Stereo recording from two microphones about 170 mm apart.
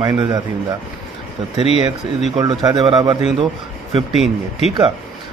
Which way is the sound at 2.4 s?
20° right (ahead or behind).